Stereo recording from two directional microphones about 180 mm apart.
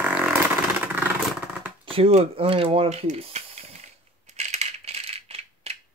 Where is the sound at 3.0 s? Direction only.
40° right (ahead or behind).